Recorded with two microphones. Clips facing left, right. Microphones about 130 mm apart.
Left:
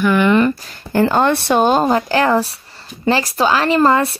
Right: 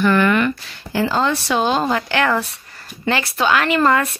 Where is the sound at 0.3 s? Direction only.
35° left (ahead or behind).